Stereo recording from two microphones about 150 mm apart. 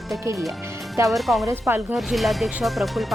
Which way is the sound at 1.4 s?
15° right (ahead or behind).